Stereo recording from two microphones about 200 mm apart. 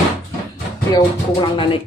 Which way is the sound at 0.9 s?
15° left (ahead or behind).